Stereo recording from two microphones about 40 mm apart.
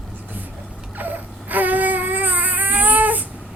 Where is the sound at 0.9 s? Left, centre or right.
Right.